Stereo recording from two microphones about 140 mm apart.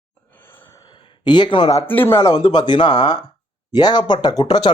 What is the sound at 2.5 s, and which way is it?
Speech, 30° left (ahead or behind).